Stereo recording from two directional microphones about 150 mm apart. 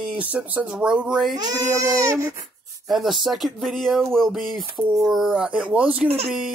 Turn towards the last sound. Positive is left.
turn(degrees=0)  # may be behind; listen again after turning